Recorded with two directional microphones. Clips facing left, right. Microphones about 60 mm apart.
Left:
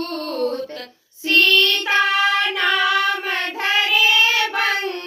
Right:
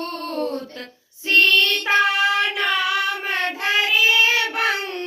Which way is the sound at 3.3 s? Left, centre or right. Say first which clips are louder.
Left 1 dB; right.